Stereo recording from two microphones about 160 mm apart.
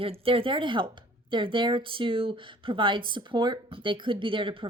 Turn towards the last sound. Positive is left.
turn(degrees=-35)  # may be behind; listen again after turning